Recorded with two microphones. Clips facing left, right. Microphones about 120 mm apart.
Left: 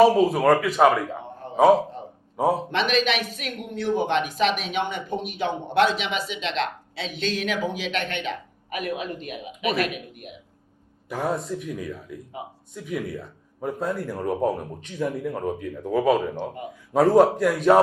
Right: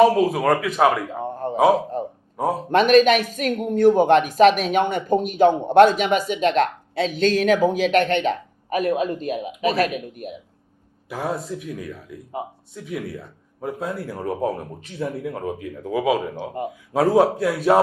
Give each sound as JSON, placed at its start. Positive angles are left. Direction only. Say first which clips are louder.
{"t": 0.0, "sound": "a man's voice", "louder": "right 1 dB", "side_deg": 0}
{"t": 1.2, "sound": "a sound", "louder": "right 10 dB", "side_deg": -45}
{"t": 1.5, "sound": "a man's voice", "louder": "left 1 dB", "side_deg": 0}
{"t": 2.6, "sound": "speech", "louder": "right 9 dB", "side_deg": -45}
{"t": 11.1, "sound": "a man's voice", "louder": "even", "side_deg": 0}